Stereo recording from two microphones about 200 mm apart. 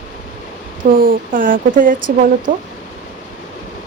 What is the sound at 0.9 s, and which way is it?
A woman's voice, 45° right (ahead or behind).